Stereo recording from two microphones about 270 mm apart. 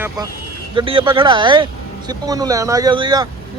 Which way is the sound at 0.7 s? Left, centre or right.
Centre.